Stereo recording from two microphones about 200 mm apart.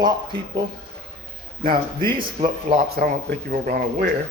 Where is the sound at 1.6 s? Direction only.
50° right (ahead or behind).